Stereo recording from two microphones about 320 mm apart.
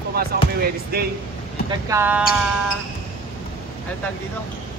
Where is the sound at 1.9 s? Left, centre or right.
Centre.